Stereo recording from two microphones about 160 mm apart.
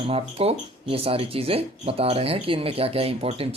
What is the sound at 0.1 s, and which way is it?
Speech, 40° right (ahead or behind).